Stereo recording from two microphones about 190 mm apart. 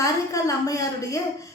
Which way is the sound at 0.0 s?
15° left (ahead or behind).